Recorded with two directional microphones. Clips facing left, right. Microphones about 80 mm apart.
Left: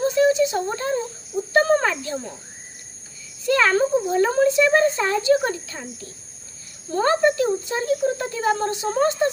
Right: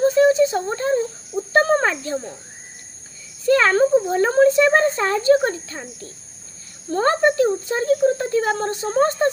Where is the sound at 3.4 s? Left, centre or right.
Right.